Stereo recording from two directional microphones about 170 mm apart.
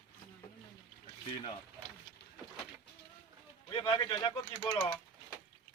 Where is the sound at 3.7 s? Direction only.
30° left (ahead or behind).